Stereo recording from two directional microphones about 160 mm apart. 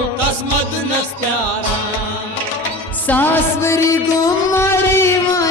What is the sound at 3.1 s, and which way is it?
Music, 15° left (ahead or behind).